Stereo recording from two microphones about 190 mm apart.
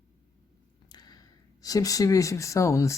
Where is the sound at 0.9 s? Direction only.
20° left (ahead or behind).